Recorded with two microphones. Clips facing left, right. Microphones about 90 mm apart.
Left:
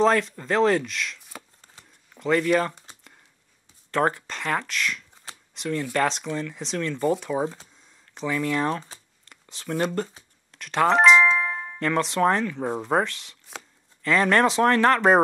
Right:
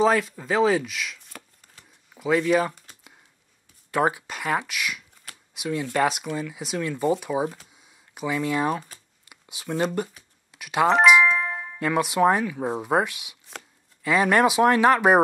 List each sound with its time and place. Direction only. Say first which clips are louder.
0.0 s speech: even; 5° right (ahead or behind)
1.8 s a sound: left 1 dB; 25° left (ahead or behind)
2.1 s speech: even; 5° right (ahead or behind)
3.9 s speech: even; 10° right (ahead or behind)
5.3 s a sound: even; 10° right (ahead or behind)
5.9 s speech: right 2 dB; 10° right (ahead or behind)
7.7 s a sound: even; 10° right (ahead or behind)
9.2 s speech: right 1 dB; 10° right (ahead or behind)
10.5 s doorbell: even; 10° right (ahead or behind)
11.8 s speech: right 1 dB; 10° right (ahead or behind)